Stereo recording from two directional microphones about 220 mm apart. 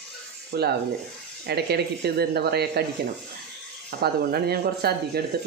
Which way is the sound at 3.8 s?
45° right (ahead or behind).